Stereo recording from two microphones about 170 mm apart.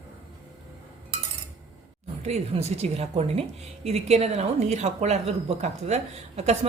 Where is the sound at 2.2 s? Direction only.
40° right (ahead or behind).